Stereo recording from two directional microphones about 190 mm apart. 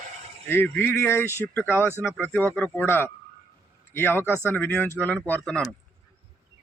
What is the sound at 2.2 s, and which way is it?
Speech, 10° left (ahead or behind).